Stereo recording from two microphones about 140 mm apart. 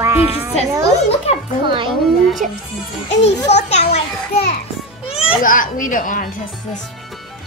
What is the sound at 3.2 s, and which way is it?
A child's voice, 50° left (ahead or behind).